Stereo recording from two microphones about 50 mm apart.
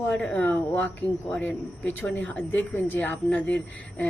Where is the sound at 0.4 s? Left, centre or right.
Left.